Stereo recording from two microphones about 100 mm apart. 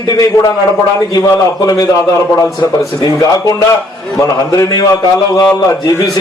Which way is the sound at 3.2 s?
35° left (ahead or behind).